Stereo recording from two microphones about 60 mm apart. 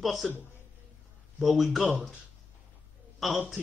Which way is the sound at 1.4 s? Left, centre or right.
Centre.